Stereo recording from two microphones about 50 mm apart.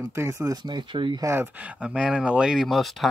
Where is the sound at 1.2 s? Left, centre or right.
Right.